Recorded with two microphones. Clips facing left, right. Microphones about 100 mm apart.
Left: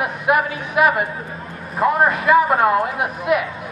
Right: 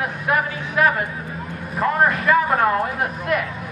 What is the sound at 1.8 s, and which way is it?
A man's voice, 5° left (ahead or behind).